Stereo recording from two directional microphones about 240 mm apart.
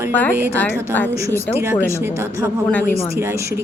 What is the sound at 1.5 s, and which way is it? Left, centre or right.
A woman's voice, centre.